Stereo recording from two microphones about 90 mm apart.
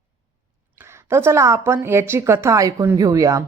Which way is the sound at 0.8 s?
30° right (ahead or behind).